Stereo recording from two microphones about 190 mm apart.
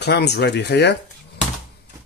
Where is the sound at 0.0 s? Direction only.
60° left (ahead or behind).